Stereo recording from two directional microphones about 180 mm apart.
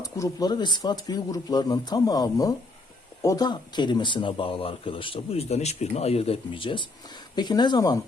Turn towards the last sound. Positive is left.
turn(degrees=25)  # may be behind; listen again after turning